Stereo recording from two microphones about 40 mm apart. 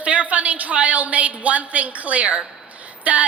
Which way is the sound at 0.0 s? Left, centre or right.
Right.